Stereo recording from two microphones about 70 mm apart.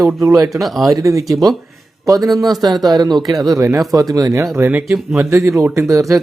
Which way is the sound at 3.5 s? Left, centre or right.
Right.